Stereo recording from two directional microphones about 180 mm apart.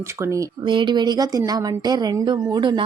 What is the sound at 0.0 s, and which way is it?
A woman's voice, 15° right (ahead or behind).